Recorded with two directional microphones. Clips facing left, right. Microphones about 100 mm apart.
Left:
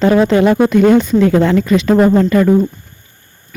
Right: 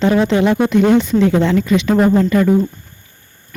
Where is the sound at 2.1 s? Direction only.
60° left (ahead or behind).